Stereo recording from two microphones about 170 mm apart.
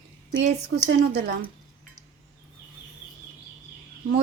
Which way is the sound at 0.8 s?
85° right.